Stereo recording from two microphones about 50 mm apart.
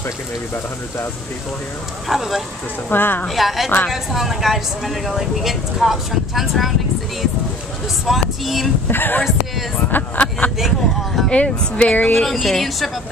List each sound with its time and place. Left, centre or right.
2.0 s speech: centre
2.9 s speech: left
3.3 s speech: centre
8.0 s speech: centre
8.8 s speech: left
11.2 s speech: left
12.2 s speech: centre